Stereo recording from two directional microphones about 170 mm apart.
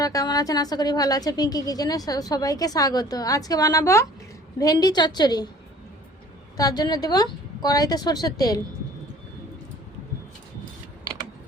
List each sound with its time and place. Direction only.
0.0 s a woman's voice: 20° left (ahead or behind)
6.6 s a woman's voice: 20° left (ahead or behind)